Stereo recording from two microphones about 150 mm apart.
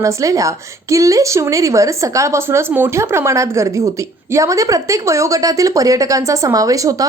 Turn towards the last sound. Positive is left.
turn(degrees=-20)  # may be behind; listen again after turning